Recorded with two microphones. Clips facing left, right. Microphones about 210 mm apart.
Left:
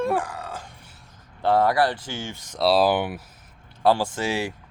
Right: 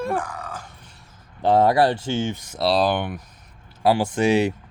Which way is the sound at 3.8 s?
15° right (ahead or behind).